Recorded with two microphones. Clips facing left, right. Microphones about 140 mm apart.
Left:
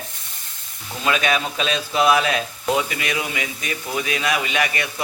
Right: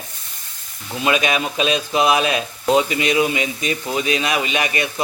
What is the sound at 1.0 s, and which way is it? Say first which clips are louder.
Speech: right 2 dB; 20° right (ahead or behind).